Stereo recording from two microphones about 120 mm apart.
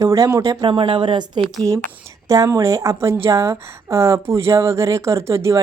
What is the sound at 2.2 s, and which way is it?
Speech, 25° right (ahead or behind).